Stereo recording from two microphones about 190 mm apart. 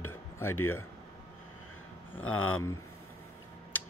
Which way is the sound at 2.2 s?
90° left.